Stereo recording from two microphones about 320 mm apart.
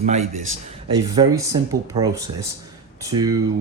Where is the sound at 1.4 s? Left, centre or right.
Centre.